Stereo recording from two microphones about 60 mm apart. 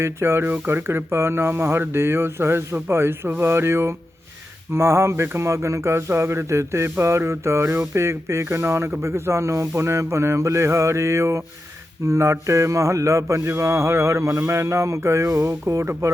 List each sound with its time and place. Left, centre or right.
0.0 s speech: right
12.0 s a sound: right
15.9 s speech: right